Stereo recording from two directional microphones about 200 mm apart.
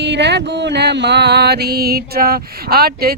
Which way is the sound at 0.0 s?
60° right (ahead or behind).